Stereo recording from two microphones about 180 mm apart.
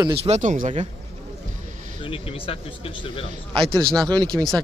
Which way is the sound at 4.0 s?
20° right (ahead or behind).